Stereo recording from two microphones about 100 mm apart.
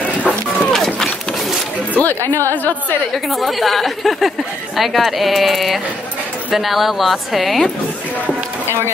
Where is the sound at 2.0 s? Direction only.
20° left (ahead or behind).